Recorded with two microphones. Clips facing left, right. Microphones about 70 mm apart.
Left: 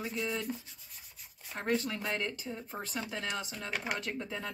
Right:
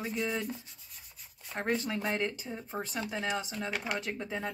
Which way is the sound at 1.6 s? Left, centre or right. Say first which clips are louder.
Right 1 dB; centre.